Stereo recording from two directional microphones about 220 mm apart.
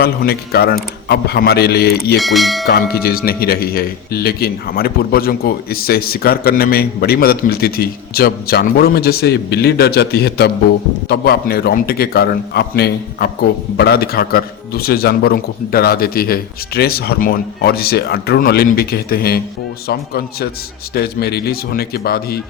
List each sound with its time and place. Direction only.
0.0 s speech: 45° left (ahead or behind)
2.1 s speech: centre (ahead or behind)
2.6 s speech: 45° left (ahead or behind)